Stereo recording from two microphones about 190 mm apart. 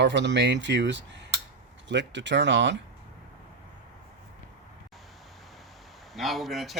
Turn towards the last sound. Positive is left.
turn(degrees=0)  # may be behind; listen again after turning